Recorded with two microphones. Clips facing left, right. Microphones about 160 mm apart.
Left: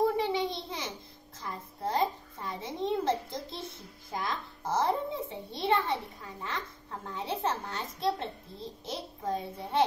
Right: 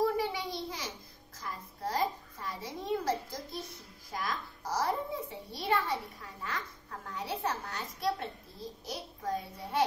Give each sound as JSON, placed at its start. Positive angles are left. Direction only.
{"t": 0.0, "sound": "a sound", "side_deg": 25}
{"t": 4.1, "sound": "a child's voice", "side_deg": 25}
{"t": 7.1, "sound": "a child's voice", "side_deg": 25}